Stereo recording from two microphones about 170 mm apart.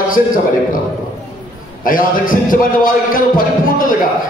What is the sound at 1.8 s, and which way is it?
A man's voice, 55° left (ahead or behind).